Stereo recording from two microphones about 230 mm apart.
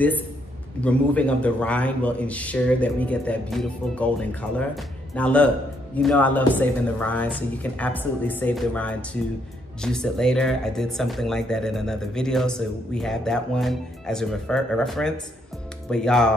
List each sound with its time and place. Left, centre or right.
0.7 s speech: centre